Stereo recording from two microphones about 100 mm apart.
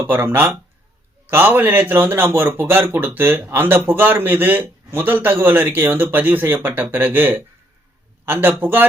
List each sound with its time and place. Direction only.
0.0 s a man's voice: 20° right (ahead or behind)